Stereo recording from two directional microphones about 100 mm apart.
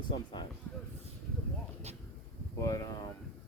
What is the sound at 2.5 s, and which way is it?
Speech, 35° left (ahead or behind).